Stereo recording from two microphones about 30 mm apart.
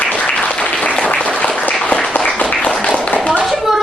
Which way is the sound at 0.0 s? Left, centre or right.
Left.